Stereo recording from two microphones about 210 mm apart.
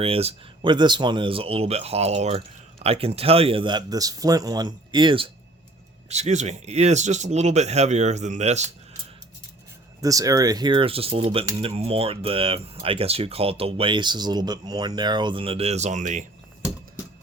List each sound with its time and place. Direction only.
0.0 s speech: 30° right (ahead or behind)
10.0 s speech: 15° right (ahead or behind); by 16.2 s 35° right (ahead or behind)